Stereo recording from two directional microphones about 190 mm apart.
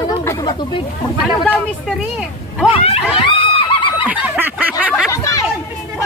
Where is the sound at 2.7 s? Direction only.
30° left (ahead or behind).